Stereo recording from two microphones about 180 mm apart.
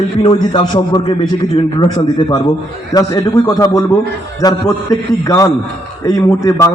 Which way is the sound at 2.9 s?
20° left (ahead or behind).